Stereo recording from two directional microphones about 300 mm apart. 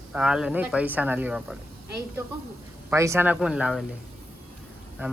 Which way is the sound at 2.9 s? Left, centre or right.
Centre.